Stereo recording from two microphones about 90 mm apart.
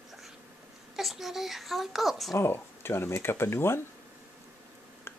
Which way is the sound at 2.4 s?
25° left (ahead or behind).